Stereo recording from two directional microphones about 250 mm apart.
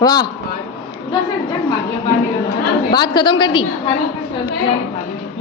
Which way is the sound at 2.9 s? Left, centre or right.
Centre.